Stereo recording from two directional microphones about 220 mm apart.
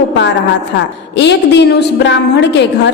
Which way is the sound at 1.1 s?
50° left (ahead or behind).